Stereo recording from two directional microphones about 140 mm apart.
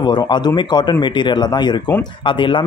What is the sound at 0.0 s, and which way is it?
A man's voice, 30° left (ahead or behind).